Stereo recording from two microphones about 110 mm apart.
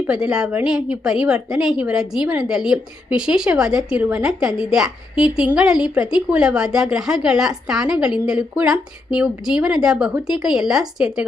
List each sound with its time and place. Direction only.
0.1 s a woman's voice: 5° right (ahead or behind)
4.0 s a woman's voice: 15° right (ahead or behind)
4.3 s a woman's voice: 5° right (ahead or behind)